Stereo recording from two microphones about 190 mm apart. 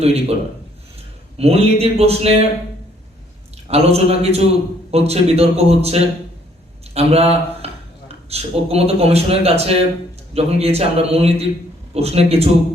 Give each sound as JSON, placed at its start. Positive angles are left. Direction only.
{"t": 0.0, "sound": "a man's voice", "side_deg": -35}
{"t": 1.4, "sound": "a man's voice", "side_deg": -30}
{"t": 3.7, "sound": "a man's voice", "side_deg": -35}